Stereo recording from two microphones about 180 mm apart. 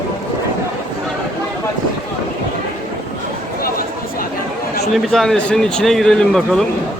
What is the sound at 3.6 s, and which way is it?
Chatter, 55° left (ahead or behind).